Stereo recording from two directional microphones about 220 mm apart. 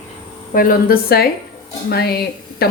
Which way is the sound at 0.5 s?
40° left (ahead or behind).